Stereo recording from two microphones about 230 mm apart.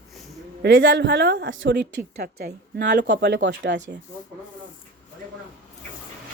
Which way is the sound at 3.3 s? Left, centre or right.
Right.